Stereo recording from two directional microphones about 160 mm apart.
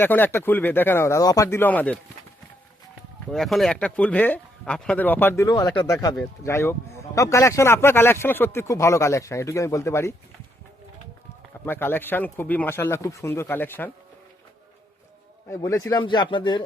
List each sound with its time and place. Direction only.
0.0 s speech: 10° left (ahead or behind)
3.3 s speech: centre (ahead or behind)
11.6 s speech: 15° left (ahead or behind)
15.4 s a man's voice: 15° left (ahead or behind)